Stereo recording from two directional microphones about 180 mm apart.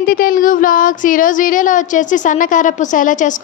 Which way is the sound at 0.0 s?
50° left (ahead or behind).